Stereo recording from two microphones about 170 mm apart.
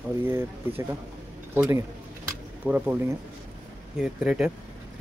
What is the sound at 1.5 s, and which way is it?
Speech, 15° right (ahead or behind).